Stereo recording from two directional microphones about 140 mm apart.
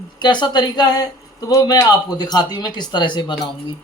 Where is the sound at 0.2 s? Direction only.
35° left (ahead or behind).